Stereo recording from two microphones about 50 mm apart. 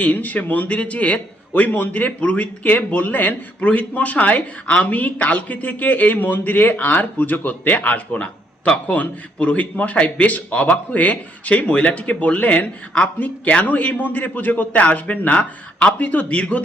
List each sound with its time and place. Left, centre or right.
0.0 s a man's voice: left
13.1 s a man's voice: left